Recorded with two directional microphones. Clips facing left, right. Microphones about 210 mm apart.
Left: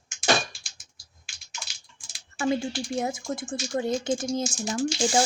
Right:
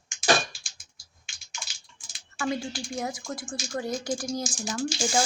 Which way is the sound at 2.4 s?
25° left (ahead or behind).